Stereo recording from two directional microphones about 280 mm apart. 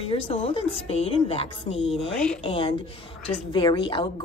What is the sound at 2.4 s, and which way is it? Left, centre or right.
Speech, centre.